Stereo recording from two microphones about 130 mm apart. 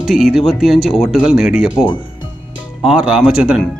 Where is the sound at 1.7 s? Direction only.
35° left (ahead or behind).